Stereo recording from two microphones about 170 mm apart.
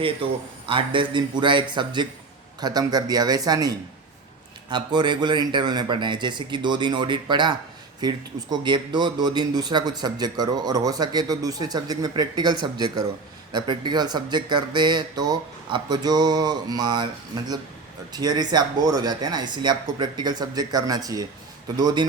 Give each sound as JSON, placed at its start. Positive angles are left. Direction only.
{"t": 0.2, "sound": "a man's voice", "side_deg": -30}
{"t": 18.1, "sound": "a man's voice", "side_deg": -25}